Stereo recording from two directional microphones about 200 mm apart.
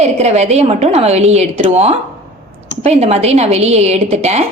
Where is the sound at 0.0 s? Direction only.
35° right (ahead or behind).